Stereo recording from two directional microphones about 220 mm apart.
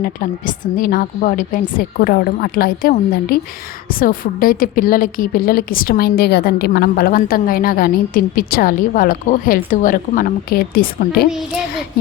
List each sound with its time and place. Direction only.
0.0 s a woman's voice: 40° left (ahead or behind)